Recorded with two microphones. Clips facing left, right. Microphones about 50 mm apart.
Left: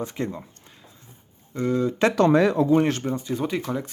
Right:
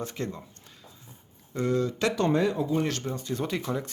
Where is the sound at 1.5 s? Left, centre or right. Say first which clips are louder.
Left 2 dB; centre.